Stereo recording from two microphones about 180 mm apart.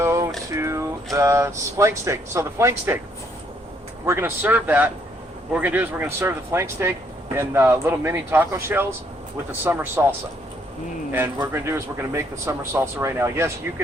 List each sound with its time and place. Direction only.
0.0 s a sound: 15° right (ahead or behind)
1.1 s speech: 15° right (ahead or behind)
4.0 s speech: 15° right (ahead or behind)